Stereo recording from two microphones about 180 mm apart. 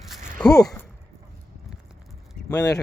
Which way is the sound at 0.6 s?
20° left (ahead or behind).